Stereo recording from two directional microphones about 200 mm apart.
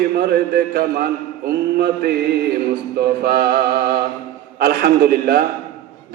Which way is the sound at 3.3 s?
55° right (ahead or behind).